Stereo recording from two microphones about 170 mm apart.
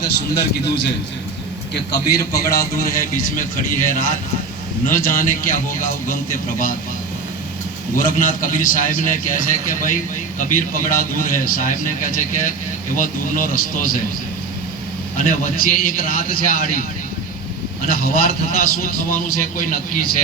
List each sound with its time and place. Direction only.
1.9 s a man's voice: 65° left (ahead or behind)
7.9 s a man's voice: 55° left (ahead or behind)
15.2 s a man's voice: 55° left (ahead or behind)
17.8 s a man's voice: 60° left (ahead or behind)